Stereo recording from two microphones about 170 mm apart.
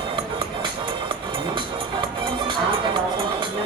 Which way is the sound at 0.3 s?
30° right (ahead or behind).